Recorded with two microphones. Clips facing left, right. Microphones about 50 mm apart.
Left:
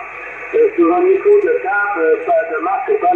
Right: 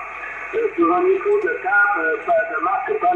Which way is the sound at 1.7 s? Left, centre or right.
Centre.